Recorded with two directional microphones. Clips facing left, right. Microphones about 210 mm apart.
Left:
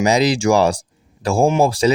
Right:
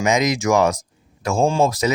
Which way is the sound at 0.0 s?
35° left (ahead or behind).